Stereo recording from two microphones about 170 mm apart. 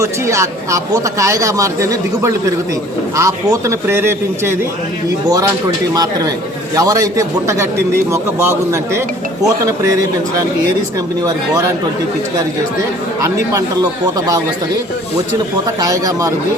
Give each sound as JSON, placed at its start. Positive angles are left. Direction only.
{"t": 0.0, "sound": "a man's voice", "side_deg": -20}
{"t": 5.9, "sound": "a man's voice", "side_deg": -20}
{"t": 11.2, "sound": "speech", "side_deg": -20}
{"t": 13.2, "sound": "speech", "side_deg": -20}
{"t": 15.8, "sound": "speech", "side_deg": -20}